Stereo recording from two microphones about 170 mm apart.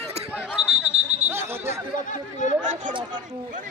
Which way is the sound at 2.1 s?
45° left (ahead or behind).